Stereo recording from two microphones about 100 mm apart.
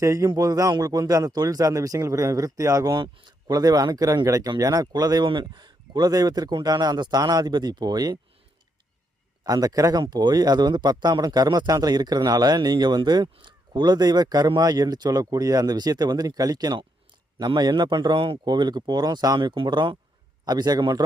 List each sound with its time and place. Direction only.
0.0 s speech: 30° right (ahead or behind)
9.4 s speech: 40° right (ahead or behind)